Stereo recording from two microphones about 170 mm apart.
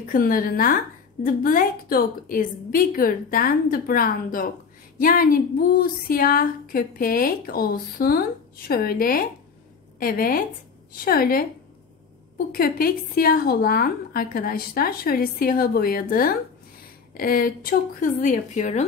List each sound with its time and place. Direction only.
0.0 s a woman's voice: 55° left (ahead or behind)
12.5 s a woman's voice: 60° left (ahead or behind); by 18.9 s 40° left (ahead or behind)